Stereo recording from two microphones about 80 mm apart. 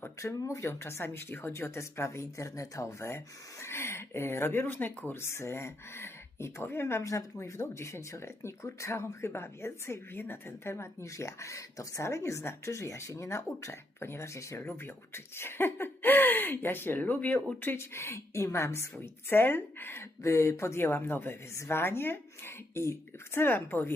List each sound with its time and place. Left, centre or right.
0.0 s speech: left